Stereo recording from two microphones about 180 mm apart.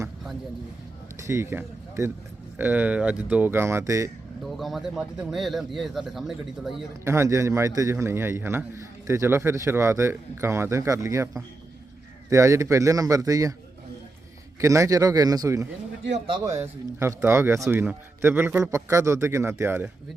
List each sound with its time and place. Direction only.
1.1 s a man's voice: 15° right (ahead or behind)
4.4 s speech: centre (ahead or behind)
7.0 s a man's voice: 15° right (ahead or behind)
12.3 s a man's voice: 15° right (ahead or behind)
14.6 s a man's voice: 15° right (ahead or behind)